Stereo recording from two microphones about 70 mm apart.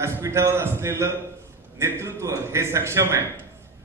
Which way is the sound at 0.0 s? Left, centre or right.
Right.